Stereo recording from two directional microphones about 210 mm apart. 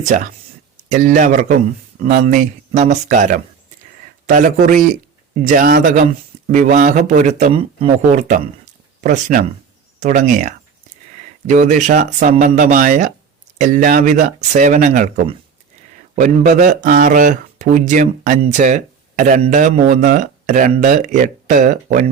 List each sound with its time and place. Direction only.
0.1 s speech: 40° right (ahead or behind)